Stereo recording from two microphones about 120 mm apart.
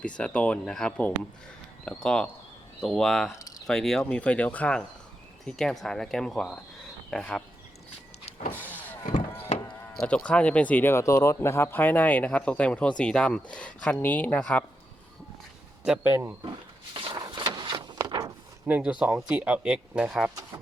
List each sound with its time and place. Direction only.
0.0 s speech: 10° left (ahead or behind)
8.5 s vehicle: 15° left (ahead or behind)
9.8 s speech: 10° left (ahead or behind)
16.0 s speech: 20° right (ahead or behind)
16.9 s a sound: 45° right (ahead or behind)
17.2 s a sound: 35° right (ahead or behind)
18.7 s speech: 10° right (ahead or behind)